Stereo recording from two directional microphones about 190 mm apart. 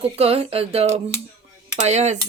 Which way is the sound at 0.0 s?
30° right (ahead or behind).